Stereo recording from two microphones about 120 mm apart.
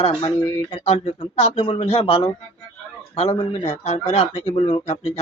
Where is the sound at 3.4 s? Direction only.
65° left (ahead or behind).